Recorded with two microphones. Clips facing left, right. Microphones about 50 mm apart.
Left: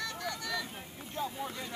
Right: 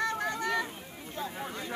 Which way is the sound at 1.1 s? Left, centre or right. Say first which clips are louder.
Left 1 dB; centre.